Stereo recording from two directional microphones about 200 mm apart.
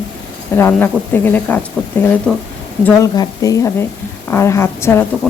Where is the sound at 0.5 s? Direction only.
10° left (ahead or behind).